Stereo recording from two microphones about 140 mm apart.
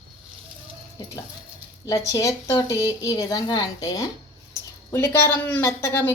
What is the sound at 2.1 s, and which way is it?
A woman's voice, 25° left (ahead or behind).